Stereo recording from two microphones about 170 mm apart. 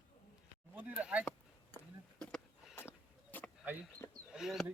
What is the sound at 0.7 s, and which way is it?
Speech, 10° right (ahead or behind).